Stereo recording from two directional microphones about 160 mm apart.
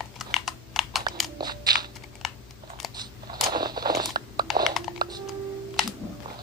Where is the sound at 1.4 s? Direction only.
25° right (ahead or behind).